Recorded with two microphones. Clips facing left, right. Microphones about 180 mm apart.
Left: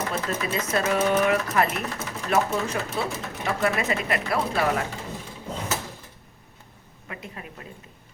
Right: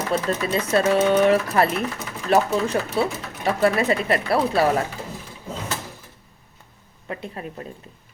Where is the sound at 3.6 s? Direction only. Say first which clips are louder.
Right 6 dB; 35° right (ahead or behind).